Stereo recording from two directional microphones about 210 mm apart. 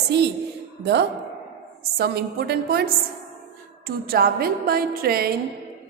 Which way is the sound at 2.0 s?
50° right (ahead or behind).